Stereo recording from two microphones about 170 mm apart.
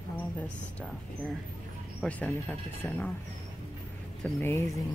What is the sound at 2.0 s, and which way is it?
Speech, 10° left (ahead or behind).